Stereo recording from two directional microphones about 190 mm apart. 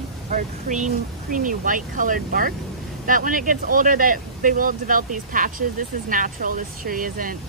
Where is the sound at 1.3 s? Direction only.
45° right (ahead or behind).